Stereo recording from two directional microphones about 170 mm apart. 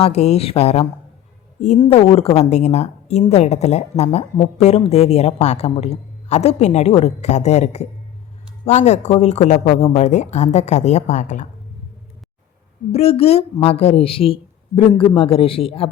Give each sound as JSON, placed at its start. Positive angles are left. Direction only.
{"t": 0.0, "sound": "a woman's voice", "side_deg": 40}
{"t": 1.9, "sound": "a woman's voice", "side_deg": 35}
{"t": 12.9, "sound": "a woman's voice", "side_deg": 35}